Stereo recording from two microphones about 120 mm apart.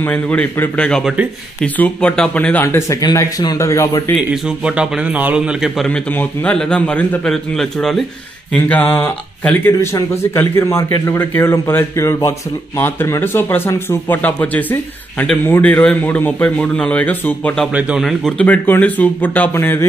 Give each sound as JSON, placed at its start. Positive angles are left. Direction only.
{"t": 0.0, "sound": "speech", "side_deg": 10}
{"t": 4.3, "sound": "a man's voice", "side_deg": -5}
{"t": 5.9, "sound": "speech", "side_deg": 10}
{"t": 8.6, "sound": "speech", "side_deg": 15}
{"t": 17.7, "sound": "a man's voice", "side_deg": -5}
{"t": 18.4, "sound": "speech", "side_deg": 15}